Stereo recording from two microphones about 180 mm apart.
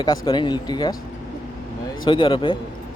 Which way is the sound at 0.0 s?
25° left (ahead or behind).